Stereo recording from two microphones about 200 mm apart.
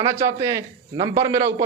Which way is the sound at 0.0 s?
15° right (ahead or behind).